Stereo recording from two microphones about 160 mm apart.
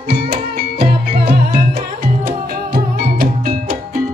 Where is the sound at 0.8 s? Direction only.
40° right (ahead or behind).